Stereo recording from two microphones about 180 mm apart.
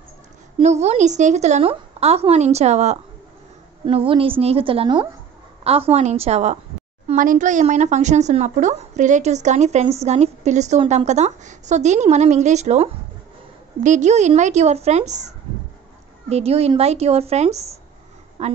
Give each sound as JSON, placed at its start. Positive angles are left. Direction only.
{"t": 0.6, "sound": "speech", "side_deg": -40}